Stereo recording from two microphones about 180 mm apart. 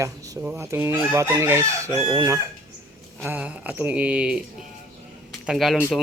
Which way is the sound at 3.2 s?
10° right (ahead or behind).